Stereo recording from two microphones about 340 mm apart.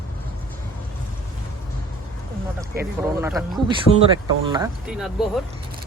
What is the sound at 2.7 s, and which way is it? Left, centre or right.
Speech, centre.